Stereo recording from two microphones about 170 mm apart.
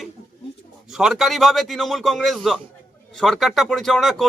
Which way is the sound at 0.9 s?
Centre (ahead or behind).